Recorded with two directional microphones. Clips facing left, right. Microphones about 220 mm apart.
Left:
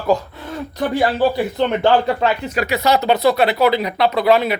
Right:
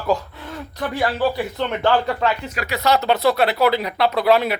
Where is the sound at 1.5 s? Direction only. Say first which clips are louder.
Left 5 dB; 20° left (ahead or behind).